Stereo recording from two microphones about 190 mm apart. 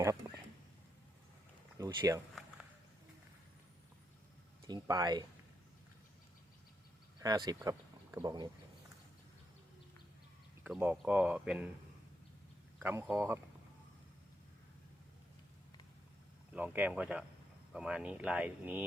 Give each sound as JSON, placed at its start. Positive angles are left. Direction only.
{"t": 1.8, "sound": "speech", "side_deg": -20}
{"t": 4.6, "sound": "speech", "side_deg": -20}
{"t": 7.2, "sound": "speech", "side_deg": -20}
{"t": 10.7, "sound": "speech", "side_deg": -5}
{"t": 12.8, "sound": "speech", "side_deg": -15}
{"t": 16.6, "sound": "speech", "side_deg": -10}